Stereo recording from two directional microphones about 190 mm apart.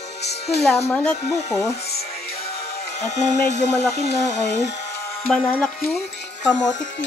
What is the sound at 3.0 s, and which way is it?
Speech, 40° left (ahead or behind).